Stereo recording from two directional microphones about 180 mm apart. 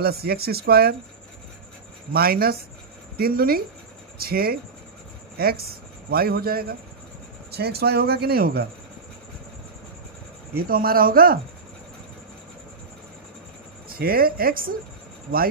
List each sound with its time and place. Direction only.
0.0 s speech: 60° right (ahead or behind)
2.1 s speech: 55° right (ahead or behind)
10.5 s a man's voice: 55° right (ahead or behind)
13.8 s a man's voice: 55° right (ahead or behind)